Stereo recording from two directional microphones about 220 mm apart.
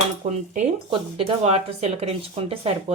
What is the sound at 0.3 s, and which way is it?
Speech, 30° right (ahead or behind).